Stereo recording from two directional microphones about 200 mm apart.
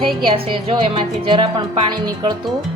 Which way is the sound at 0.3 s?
25° right (ahead or behind).